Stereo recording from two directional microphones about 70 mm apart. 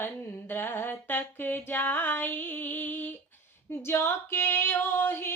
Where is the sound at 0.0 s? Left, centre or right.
Left.